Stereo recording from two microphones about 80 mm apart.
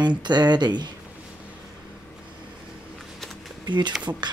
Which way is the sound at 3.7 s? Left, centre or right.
Right.